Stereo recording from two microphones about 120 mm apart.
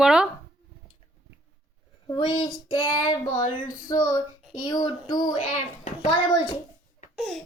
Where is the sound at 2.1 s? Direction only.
40° left (ahead or behind).